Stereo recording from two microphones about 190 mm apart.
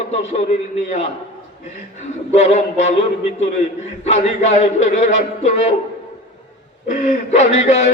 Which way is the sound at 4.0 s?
35° left (ahead or behind).